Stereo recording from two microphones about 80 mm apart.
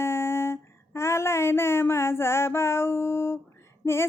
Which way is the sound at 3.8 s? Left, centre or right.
Left.